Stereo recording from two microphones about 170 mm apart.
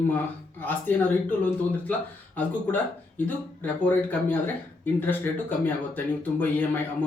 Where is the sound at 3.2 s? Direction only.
10° left (ahead or behind).